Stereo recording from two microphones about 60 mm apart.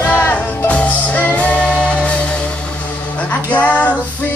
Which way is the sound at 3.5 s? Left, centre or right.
Left.